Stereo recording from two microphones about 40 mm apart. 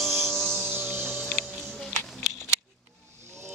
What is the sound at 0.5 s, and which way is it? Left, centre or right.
Music, right.